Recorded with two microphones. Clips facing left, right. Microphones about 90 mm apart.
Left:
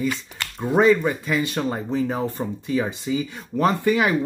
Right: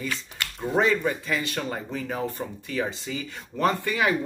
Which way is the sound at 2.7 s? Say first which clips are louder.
Left 6 dB; 20° left (ahead or behind).